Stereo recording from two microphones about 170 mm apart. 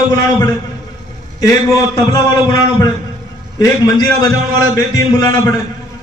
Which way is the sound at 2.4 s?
25° left (ahead or behind).